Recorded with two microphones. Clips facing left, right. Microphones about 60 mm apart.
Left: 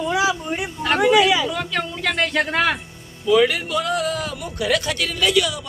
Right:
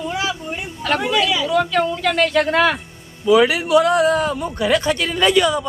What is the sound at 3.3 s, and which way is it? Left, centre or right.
Speech, right.